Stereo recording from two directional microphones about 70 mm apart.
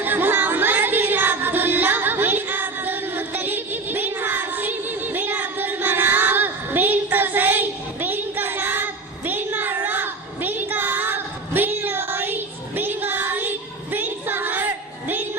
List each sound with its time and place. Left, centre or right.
0.0 s music: right